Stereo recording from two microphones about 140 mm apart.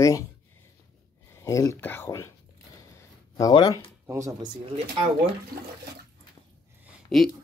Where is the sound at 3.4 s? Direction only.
30° left (ahead or behind).